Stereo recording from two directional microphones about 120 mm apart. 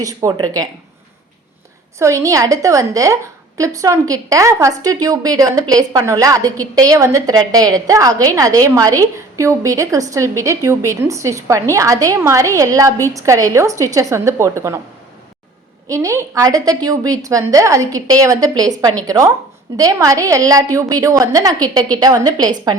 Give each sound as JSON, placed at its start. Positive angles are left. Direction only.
{"t": 0.0, "sound": "a woman's voice", "side_deg": -30}
{"t": 2.0, "sound": "a woman's voice", "side_deg": -25}
{"t": 15.9, "sound": "a woman's voice", "side_deg": -25}